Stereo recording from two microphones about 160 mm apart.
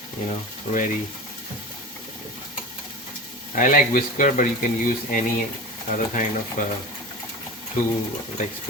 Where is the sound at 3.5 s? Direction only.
55° left (ahead or behind).